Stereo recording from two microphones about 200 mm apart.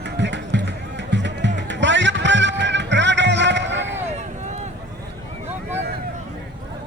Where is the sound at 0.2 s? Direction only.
65° right (ahead or behind).